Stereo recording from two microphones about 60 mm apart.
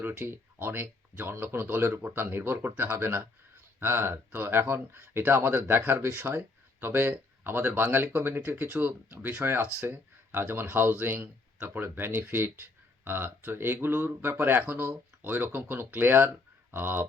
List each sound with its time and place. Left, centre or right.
0.0 s speech: right
9.4 s speech: right